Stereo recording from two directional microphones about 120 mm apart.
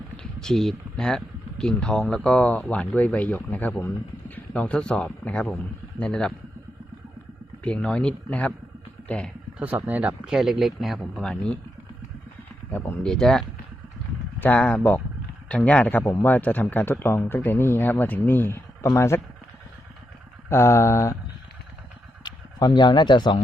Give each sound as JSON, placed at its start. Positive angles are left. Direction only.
{"t": 0.4, "sound": "speech", "side_deg": 0}
{"t": 7.6, "sound": "speech", "side_deg": 10}
{"t": 9.6, "sound": "speech", "side_deg": -10}
{"t": 13.0, "sound": "speech", "side_deg": 5}
{"t": 14.4, "sound": "speech", "side_deg": 10}
{"t": 20.5, "sound": "speech", "side_deg": 20}
{"t": 22.2, "sound": "speech", "side_deg": 35}